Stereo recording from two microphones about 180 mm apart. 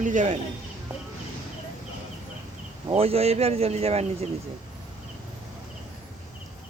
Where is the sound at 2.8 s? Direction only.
35° right (ahead or behind).